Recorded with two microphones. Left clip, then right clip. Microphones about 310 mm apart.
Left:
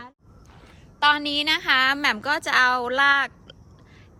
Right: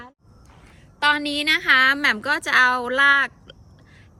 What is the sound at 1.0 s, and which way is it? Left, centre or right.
A woman's voice, centre.